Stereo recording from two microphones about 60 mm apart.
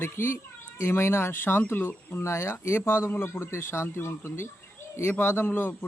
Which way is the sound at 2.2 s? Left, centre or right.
Left.